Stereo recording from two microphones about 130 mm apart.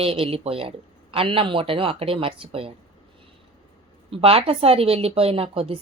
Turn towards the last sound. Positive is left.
turn(degrees=-50)  # may be behind; listen again after turning